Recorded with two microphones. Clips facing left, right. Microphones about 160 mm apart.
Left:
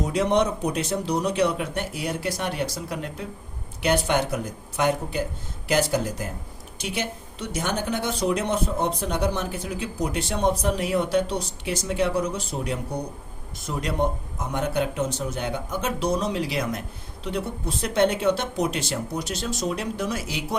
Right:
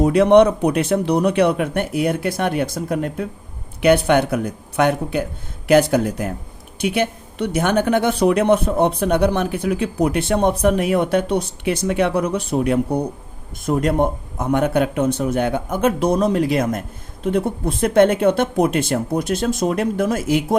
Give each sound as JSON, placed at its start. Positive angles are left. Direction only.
{"t": 0.0, "sound": "speech", "side_deg": -60}